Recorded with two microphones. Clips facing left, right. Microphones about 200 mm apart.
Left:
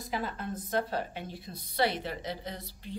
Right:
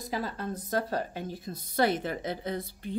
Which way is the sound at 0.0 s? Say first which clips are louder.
Right 2 dB; 40° right (ahead or behind).